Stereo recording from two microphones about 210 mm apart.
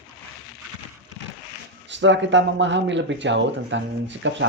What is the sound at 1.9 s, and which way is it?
Speech, 60° right (ahead or behind).